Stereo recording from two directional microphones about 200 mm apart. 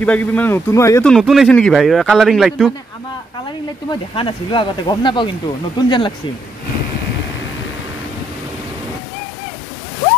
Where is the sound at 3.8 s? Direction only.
25° left (ahead or behind).